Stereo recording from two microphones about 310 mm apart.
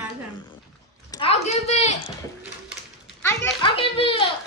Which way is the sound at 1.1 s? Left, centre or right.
Centre.